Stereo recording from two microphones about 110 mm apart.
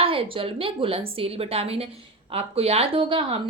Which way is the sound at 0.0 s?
55° right (ahead or behind).